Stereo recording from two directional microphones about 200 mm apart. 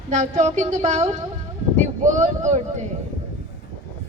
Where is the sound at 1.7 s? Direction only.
35° right (ahead or behind).